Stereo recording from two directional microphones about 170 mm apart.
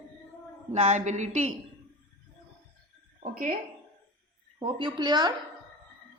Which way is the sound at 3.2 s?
55° right (ahead or behind).